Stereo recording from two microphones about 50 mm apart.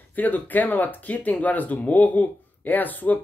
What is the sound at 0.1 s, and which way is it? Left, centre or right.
Speech, left.